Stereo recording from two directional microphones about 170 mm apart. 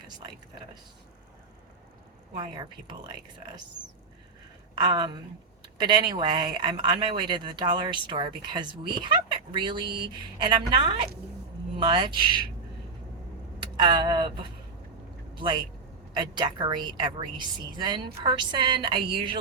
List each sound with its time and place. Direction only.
4.8 s a woman's voice: 25° right (ahead or behind)
13.8 s a woman's voice: 25° right (ahead or behind)
15.4 s a woman's voice: 30° right (ahead or behind)